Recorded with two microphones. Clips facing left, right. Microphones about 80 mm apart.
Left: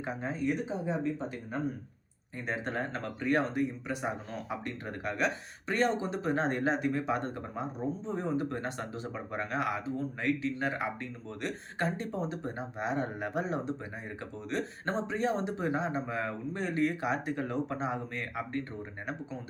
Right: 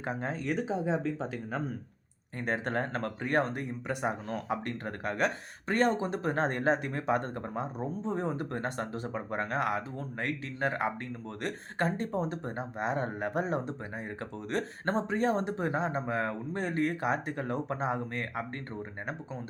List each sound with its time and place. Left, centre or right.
0.0 s speech: right
2.5 s speech: right